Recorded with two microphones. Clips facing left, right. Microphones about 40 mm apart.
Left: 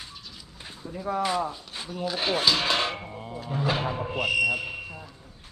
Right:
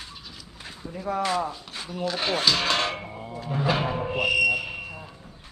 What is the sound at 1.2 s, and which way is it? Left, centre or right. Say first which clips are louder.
Speech: right 1 dB; centre.